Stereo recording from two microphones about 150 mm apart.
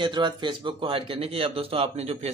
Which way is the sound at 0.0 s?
30° right (ahead or behind).